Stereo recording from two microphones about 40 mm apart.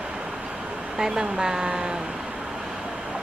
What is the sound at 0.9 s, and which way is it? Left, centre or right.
Speech, centre.